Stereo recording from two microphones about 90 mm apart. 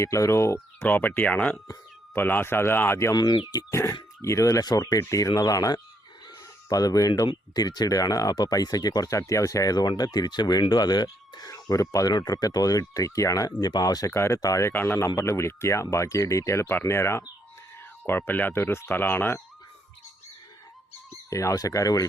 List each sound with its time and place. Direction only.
0.0 s speech: 35° left (ahead or behind)
0.8 s speech: 20° left (ahead or behind); by 14.7 s 35° left (ahead or behind)
14.7 s speech: 20° left (ahead or behind)
14.9 s speech: 35° left (ahead or behind)
21.2 s speech: 35° left (ahead or behind)